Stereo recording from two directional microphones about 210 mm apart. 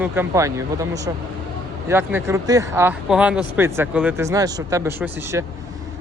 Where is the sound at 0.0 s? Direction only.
10° right (ahead or behind).